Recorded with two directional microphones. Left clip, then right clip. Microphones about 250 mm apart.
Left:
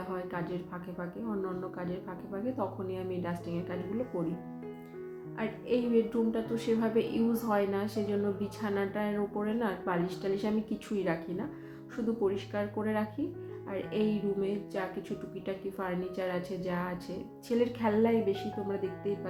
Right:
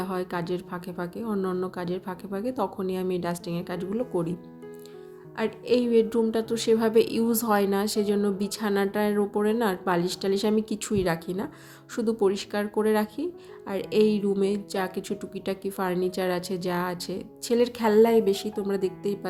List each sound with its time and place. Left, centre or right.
0.1 s a woman's voice: right
5.4 s a woman's voice: right